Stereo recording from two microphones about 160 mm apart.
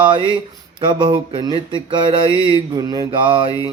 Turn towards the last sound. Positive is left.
turn(degrees=-30)  # may be behind; listen again after turning